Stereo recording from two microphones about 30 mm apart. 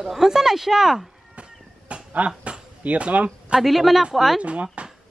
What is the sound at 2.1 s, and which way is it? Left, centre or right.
Speech, right.